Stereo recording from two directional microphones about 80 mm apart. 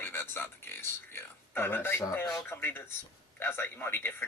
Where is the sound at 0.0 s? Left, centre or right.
Left.